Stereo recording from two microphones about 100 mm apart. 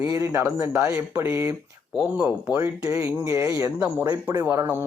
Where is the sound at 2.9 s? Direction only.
30° right (ahead or behind).